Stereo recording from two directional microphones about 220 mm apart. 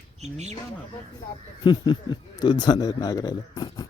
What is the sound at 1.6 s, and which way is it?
Speech, 20° left (ahead or behind).